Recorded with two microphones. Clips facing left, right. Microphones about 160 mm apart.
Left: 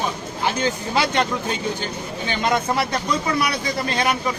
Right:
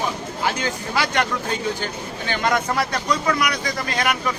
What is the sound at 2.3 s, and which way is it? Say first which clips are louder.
Speech: even; 20° left (ahead or behind).